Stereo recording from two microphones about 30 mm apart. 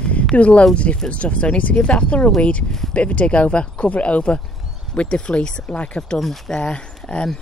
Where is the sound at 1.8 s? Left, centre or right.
Left.